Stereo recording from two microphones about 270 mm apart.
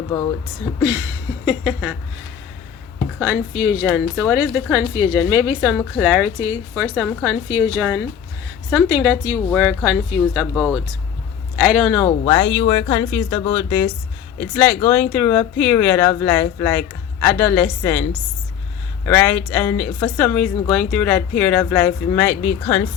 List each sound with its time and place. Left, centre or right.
1.5 s speech: centre
3.2 s a woman's voice: centre
12.0 s speech: centre
19.0 s speech: centre